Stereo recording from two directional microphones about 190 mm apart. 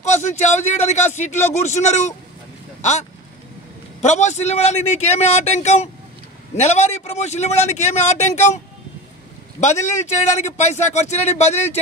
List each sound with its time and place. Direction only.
0.2 s speech: 35° left (ahead or behind)
9.6 s speech: 40° left (ahead or behind)